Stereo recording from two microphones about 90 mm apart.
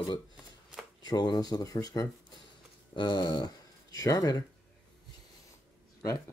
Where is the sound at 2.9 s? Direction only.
50° left (ahead or behind).